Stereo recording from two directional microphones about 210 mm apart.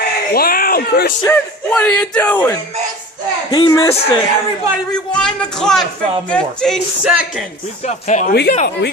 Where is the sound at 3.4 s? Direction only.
20° left (ahead or behind).